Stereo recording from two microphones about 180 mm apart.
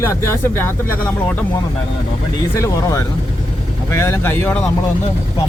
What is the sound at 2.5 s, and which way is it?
Speech, 15° left (ahead or behind).